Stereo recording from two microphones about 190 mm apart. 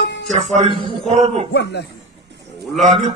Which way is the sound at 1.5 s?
60° left (ahead or behind).